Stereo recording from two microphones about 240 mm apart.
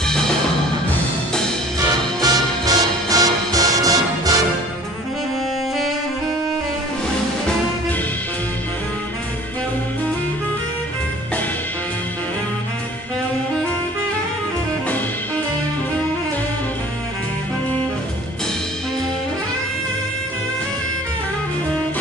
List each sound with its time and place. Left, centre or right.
2.2 s music: centre